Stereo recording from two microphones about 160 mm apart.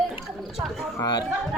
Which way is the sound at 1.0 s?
25° left (ahead or behind).